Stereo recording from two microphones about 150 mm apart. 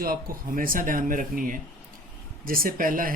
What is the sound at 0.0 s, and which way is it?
Speech, 75° right (ahead or behind).